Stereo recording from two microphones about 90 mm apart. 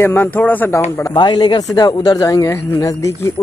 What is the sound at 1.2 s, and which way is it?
Speech, 50° left (ahead or behind).